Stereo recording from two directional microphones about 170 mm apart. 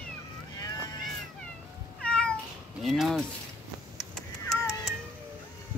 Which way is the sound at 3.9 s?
Centre (ahead or behind).